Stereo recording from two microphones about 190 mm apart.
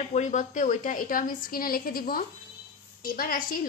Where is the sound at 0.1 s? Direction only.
40° left (ahead or behind).